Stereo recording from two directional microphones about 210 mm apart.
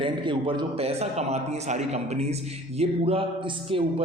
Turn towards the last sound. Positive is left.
turn(degrees=-25)  # may be behind; listen again after turning